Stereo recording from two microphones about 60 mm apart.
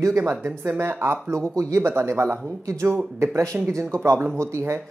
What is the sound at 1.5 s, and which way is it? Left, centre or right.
Speech, right.